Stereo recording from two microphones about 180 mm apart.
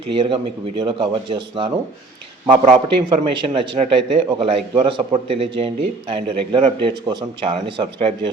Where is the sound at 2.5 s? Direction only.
40° right (ahead or behind).